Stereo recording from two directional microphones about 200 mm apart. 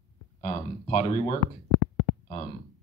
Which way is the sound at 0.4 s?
35° left (ahead or behind).